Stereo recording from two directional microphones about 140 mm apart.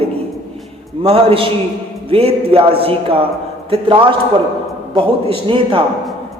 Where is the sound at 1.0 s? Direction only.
45° right (ahead or behind).